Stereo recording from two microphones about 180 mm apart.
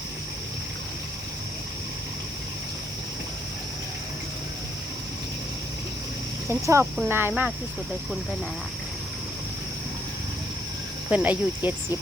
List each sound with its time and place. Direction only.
6.5 s speech: 15° right (ahead or behind)
11.1 s speech: 10° right (ahead or behind)